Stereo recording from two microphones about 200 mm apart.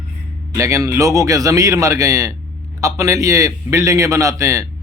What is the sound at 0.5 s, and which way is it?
Speech, 15° right (ahead or behind).